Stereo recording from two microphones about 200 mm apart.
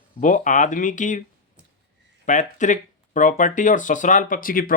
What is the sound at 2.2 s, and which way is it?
Speech, 40° left (ahead or behind).